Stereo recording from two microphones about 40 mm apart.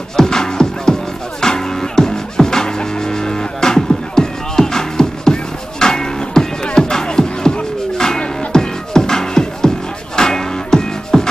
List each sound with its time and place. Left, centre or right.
0.1 s music: centre